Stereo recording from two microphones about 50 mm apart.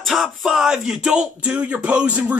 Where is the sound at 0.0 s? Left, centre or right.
Centre.